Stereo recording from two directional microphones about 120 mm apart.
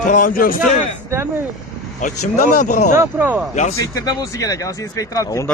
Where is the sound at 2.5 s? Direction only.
90° left.